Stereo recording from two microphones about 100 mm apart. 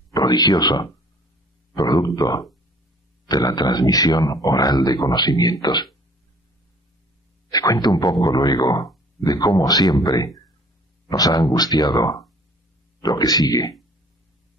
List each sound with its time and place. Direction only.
0.1 s speech: 40° left (ahead or behind)
7.5 s speech: 40° left (ahead or behind)